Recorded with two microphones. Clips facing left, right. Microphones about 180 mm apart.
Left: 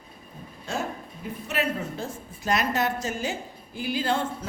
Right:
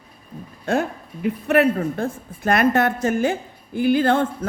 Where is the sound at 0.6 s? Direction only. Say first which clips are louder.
Right 9 dB; 60° right (ahead or behind).